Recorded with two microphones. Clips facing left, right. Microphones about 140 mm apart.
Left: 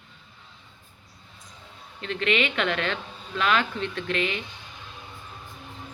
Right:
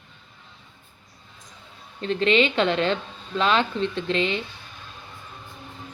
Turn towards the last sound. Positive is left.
turn(degrees=-30)  # may be behind; listen again after turning